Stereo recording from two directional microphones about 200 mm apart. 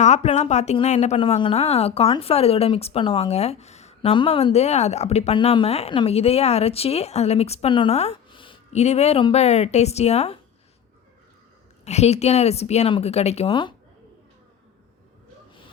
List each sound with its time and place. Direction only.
0.0 s a woman's voice: 35° left (ahead or behind)
11.9 s a woman's voice: 30° left (ahead or behind)